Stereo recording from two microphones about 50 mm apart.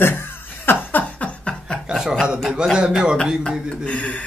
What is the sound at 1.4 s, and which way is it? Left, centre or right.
Chuckle, centre.